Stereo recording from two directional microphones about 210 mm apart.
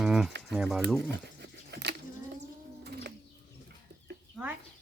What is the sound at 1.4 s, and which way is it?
Dog, 55° right (ahead or behind).